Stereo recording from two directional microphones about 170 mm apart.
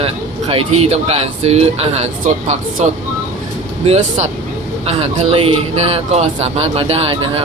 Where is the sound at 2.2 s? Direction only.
50° right (ahead or behind).